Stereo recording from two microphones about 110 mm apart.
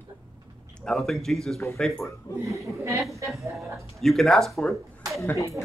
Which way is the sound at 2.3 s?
35° left (ahead or behind).